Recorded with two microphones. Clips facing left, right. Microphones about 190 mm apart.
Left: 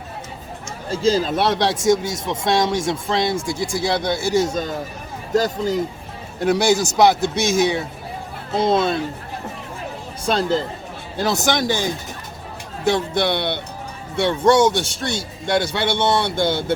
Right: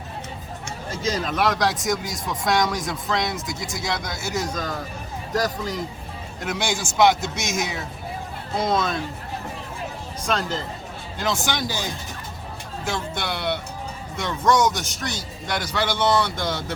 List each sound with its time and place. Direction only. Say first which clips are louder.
0.9 s speech: left 8 dB; 30° left (ahead or behind)
10.2 s speech: left 6 dB; 30° left (ahead or behind)
12.8 s speech: left 10 dB; 35° left (ahead or behind)